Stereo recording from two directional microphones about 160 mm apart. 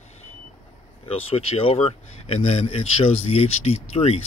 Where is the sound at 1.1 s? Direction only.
40° left (ahead or behind).